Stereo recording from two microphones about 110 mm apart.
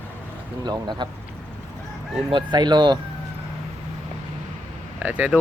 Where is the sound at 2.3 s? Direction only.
40° right (ahead or behind).